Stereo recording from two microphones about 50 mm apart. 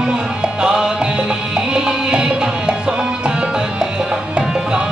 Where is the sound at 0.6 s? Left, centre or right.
Centre.